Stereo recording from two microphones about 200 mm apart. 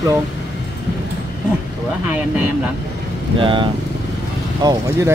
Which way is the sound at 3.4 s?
25° right (ahead or behind).